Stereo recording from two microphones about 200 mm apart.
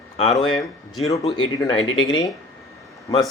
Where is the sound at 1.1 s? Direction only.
25° left (ahead or behind).